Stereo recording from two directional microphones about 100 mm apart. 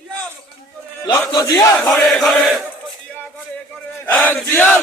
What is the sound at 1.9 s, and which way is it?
Chant, centre (ahead or behind).